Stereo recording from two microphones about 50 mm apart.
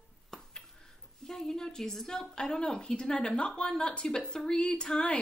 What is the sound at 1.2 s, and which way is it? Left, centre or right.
A woman's voice, centre.